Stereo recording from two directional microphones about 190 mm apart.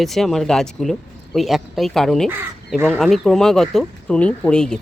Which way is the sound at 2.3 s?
10° right (ahead or behind).